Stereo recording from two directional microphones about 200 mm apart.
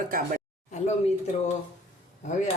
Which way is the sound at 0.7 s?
35° left (ahead or behind).